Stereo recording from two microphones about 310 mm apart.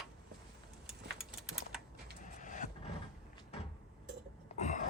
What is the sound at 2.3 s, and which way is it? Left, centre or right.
Vehicle, left.